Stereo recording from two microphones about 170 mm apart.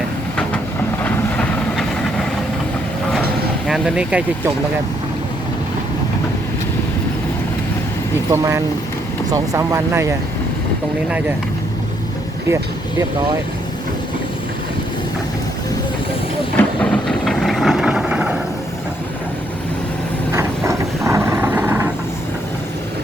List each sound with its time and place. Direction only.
1.0 s vehicle: 10° left (ahead or behind)
3.7 s speech: 5° right (ahead or behind)
8.3 s speech: 15° right (ahead or behind)
12.5 s speech: 20° right (ahead or behind)
16.6 s vehicle: 5° left (ahead or behind)
20.3 s vehicle: 15° right (ahead or behind)